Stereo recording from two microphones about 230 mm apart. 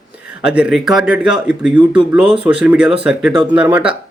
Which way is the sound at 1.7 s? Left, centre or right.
Centre.